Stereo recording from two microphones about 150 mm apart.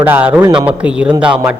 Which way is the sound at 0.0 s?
10° right (ahead or behind).